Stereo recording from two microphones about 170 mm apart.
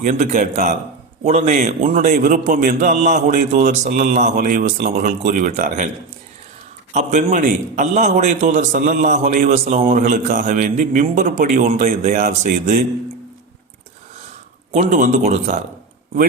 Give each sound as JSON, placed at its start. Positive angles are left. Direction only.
{"t": 0.0, "sound": "a man's voice", "side_deg": -45}
{"t": 6.9, "sound": "a man's voice", "side_deg": -45}
{"t": 11.3, "sound": "a man's voice", "side_deg": -60}
{"t": 11.6, "sound": "a man's voice", "side_deg": -40}
{"t": 14.7, "sound": "a man's voice", "side_deg": -45}